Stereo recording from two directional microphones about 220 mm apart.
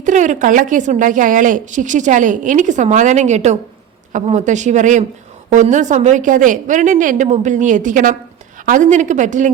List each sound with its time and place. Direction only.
0.0 s a woman's voice: 35° right (ahead or behind)